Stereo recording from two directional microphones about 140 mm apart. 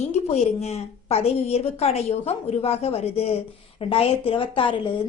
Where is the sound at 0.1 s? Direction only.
50° left (ahead or behind).